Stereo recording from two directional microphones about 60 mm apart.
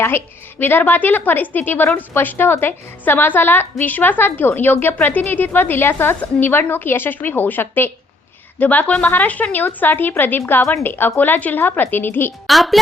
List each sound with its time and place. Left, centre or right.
0.6 s a woman's voice: left
12.5 s a woman's voice: centre